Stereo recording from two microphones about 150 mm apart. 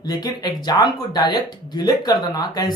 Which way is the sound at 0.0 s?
25° left (ahead or behind).